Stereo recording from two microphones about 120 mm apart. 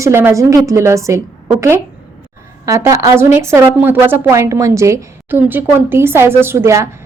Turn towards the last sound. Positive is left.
turn(degrees=-25)  # may be behind; listen again after turning